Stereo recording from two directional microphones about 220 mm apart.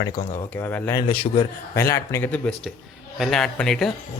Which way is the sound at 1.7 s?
10° left (ahead or behind).